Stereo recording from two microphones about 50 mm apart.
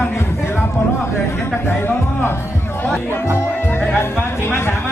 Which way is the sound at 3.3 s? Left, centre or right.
Left.